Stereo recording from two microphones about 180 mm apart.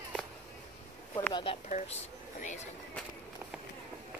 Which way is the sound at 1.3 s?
30° left (ahead or behind).